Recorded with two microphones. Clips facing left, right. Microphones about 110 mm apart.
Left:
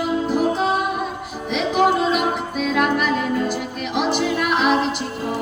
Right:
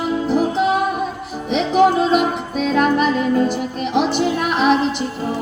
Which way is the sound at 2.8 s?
35° right (ahead or behind).